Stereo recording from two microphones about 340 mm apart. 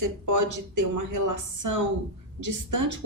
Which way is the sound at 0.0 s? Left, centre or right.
Right.